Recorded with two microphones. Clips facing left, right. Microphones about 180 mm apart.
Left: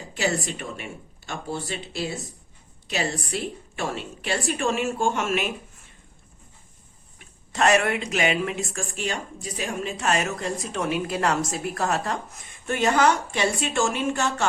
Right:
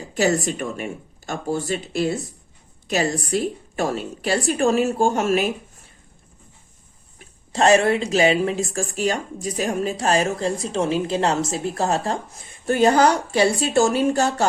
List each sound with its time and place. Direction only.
0.1 s speech: 45° right (ahead or behind)
7.2 s speech: 30° right (ahead or behind)